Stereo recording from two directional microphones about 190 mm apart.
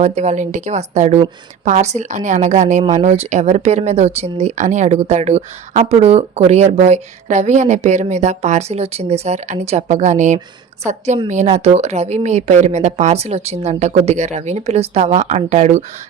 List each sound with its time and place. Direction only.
0.0 s a woman's voice: 35° right (ahead or behind)